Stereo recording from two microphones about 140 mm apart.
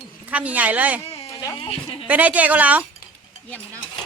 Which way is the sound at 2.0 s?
10° right (ahead or behind).